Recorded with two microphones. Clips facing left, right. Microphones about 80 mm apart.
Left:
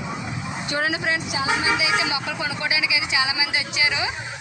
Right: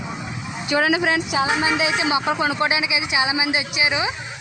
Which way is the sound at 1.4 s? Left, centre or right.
Right.